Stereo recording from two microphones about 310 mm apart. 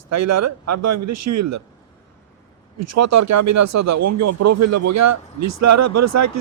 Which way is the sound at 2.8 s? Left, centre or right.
Right.